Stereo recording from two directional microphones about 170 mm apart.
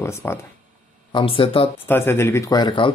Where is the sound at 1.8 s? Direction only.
15° left (ahead or behind).